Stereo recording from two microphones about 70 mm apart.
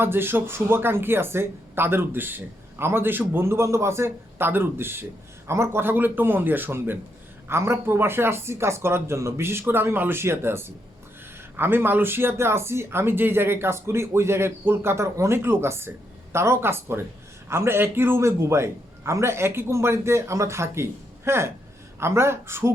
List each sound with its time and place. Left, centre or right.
0.0 s speech: right
14.9 s speech: right